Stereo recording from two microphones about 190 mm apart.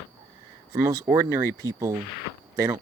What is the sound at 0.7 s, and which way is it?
Speech, 15° right (ahead or behind).